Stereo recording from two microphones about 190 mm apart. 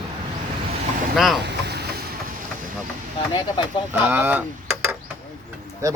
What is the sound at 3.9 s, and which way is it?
Speech, 10° right (ahead or behind).